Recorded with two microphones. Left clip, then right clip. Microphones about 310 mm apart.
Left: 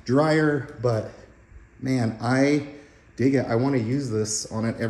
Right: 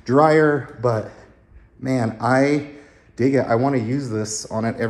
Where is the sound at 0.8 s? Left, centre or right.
Centre.